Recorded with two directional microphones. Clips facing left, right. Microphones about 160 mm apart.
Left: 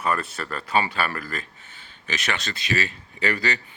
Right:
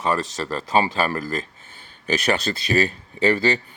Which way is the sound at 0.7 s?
35° right (ahead or behind).